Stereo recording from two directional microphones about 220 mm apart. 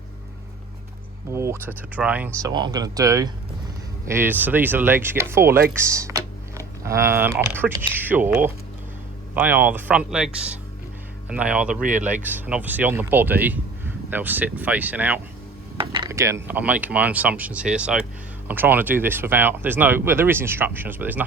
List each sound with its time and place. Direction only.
1.3 s speech: 10° right (ahead or behind)
2.5 s speech: 20° right (ahead or behind)
15.8 s speech: 20° right (ahead or behind)